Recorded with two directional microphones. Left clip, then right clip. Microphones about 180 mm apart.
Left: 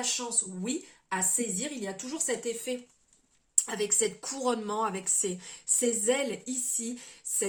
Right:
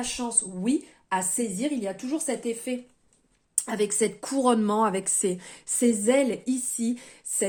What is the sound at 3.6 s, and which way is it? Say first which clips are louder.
Speech: right 6 dB; 45° right (ahead or behind).